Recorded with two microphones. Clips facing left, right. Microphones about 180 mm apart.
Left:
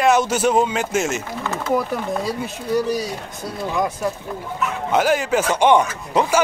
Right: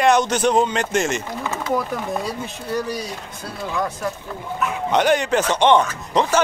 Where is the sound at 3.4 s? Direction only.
15° left (ahead or behind).